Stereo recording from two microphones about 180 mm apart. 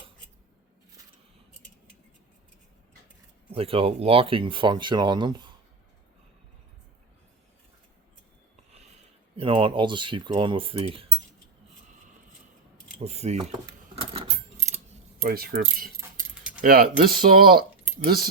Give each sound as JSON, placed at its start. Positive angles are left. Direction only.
{"t": 3.5, "sound": "speech", "side_deg": -30}
{"t": 9.3, "sound": "speech", "side_deg": -30}
{"t": 13.0, "sound": "speech", "side_deg": -35}
{"t": 13.9, "sound": "coin", "side_deg": -30}
{"t": 15.2, "sound": "speech", "side_deg": -55}